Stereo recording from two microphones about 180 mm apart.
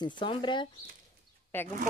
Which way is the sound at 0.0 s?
25° left (ahead or behind).